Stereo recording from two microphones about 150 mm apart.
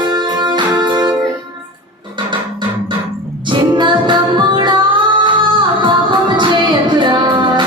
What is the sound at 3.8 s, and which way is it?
Music, 30° right (ahead or behind).